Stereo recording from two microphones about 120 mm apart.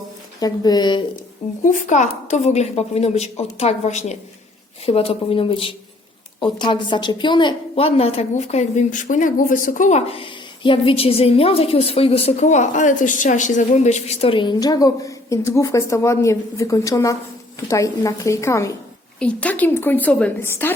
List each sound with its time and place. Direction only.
0.3 s a woman's voice: 35° left (ahead or behind)
1.6 s a woman's voice: 90° left; by 4.2 s 70° left (ahead or behind)
4.9 s a woman's voice: 55° left (ahead or behind); by 10.0 s 90° left
10.1 s a woman's voice: 50° left (ahead or behind); by 18.8 s 25° left (ahead or behind)
19.2 s a woman's voice: 10° left (ahead or behind)